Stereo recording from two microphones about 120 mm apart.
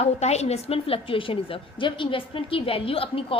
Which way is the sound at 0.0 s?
65° left (ahead or behind).